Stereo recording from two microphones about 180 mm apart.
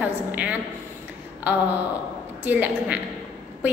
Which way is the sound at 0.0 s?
10° right (ahead or behind).